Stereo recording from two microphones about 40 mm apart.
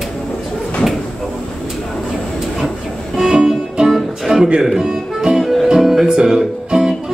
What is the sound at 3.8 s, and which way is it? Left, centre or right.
Music, centre.